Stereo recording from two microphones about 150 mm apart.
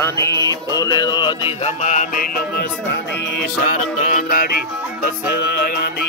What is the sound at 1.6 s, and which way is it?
Speech, 55° left (ahead or behind).